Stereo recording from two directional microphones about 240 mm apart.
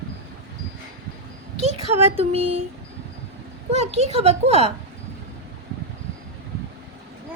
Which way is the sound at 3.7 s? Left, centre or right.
Right.